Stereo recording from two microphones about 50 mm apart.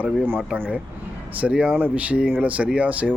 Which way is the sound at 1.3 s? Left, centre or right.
Right.